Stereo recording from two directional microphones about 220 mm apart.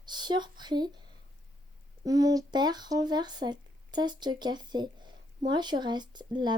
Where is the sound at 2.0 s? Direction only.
15° right (ahead or behind).